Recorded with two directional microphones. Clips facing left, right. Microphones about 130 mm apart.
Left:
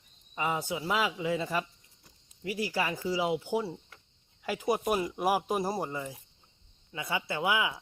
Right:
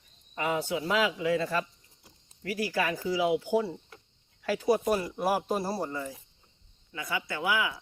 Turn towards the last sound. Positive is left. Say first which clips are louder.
# even
turn(degrees=25)  # may be behind; listen again after turning